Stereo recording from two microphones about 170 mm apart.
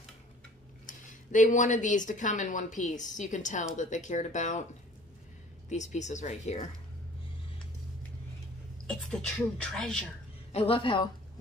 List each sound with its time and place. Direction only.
0.8 s speech: 50° left (ahead or behind)
5.7 s speech: 45° left (ahead or behind)
8.8 s speech: 5° left (ahead or behind)
10.5 s a woman's voice: 35° left (ahead or behind)